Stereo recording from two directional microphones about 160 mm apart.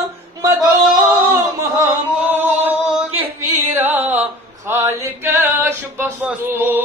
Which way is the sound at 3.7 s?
15° right (ahead or behind).